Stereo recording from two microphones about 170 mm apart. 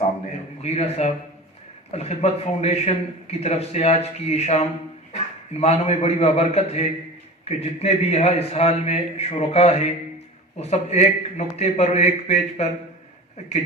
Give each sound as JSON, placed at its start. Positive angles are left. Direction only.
{"t": 0.6, "sound": "a man's voice", "side_deg": 40}